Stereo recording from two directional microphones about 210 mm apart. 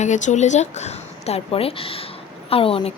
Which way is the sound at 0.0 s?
35° left (ahead or behind).